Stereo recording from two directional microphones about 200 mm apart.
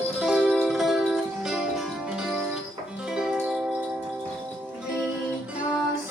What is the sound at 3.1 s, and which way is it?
Music, 5° right (ahead or behind).